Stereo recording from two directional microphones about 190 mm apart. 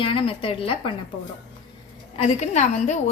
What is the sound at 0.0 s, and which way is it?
Speech, 25° left (ahead or behind).